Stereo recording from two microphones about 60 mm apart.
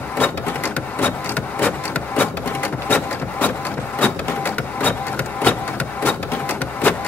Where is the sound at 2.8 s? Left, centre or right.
Left.